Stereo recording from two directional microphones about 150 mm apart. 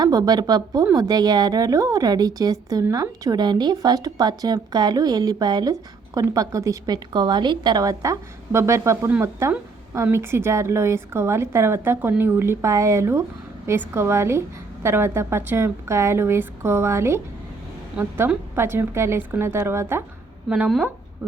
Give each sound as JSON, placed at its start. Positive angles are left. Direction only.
{"t": 0.0, "sound": "a woman's voice", "side_deg": -25}
{"t": 20.5, "sound": "a woman's voice", "side_deg": -5}